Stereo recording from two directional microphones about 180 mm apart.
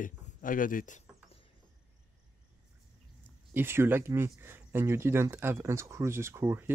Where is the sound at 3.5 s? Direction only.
15° right (ahead or behind).